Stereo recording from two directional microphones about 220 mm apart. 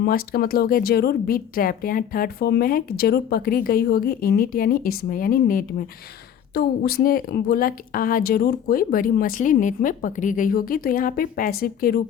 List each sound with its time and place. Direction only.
0.0 s a woman's voice: 45° left (ahead or behind)